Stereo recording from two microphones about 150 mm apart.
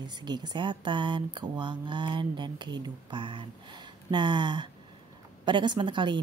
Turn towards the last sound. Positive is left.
turn(degrees=-30)  # may be behind; listen again after turning